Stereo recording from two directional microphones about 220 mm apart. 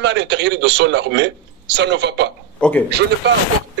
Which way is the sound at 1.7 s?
50° right (ahead or behind).